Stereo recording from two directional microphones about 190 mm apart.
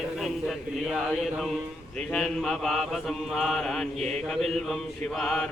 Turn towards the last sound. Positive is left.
turn(degrees=5)  # may be behind; listen again after turning